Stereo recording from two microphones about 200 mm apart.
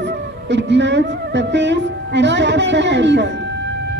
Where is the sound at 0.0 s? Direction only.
60° right (ahead or behind).